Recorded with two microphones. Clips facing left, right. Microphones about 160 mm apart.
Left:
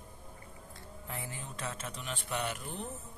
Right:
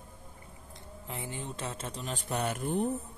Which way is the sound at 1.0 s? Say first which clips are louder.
Right 4 dB; 25° right (ahead or behind).